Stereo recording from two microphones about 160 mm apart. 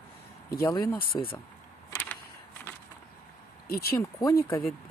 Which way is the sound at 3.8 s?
20° left (ahead or behind).